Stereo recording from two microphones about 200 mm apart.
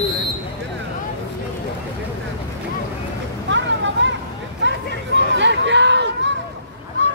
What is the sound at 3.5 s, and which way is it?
Vehicle, 65° right (ahead or behind).